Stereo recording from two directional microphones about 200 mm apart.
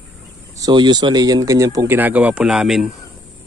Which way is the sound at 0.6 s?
20° right (ahead or behind).